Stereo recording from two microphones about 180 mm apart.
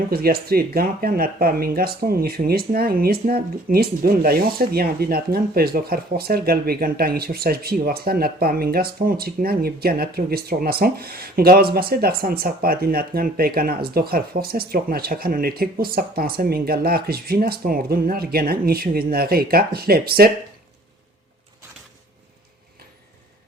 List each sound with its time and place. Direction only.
0.1 s speech: 55° right (ahead or behind)